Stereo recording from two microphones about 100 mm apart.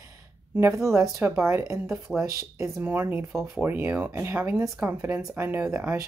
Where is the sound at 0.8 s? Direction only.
30° right (ahead or behind).